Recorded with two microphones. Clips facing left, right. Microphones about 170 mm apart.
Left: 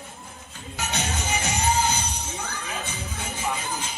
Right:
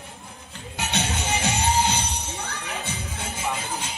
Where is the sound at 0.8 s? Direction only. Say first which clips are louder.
Right 2 dB; 60° right (ahead or behind).